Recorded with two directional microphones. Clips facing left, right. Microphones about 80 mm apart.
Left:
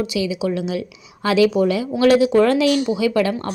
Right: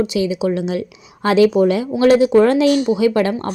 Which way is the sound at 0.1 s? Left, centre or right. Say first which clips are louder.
Right 3 dB; right.